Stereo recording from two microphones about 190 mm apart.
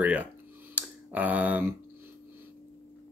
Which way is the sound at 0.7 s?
10° right (ahead or behind).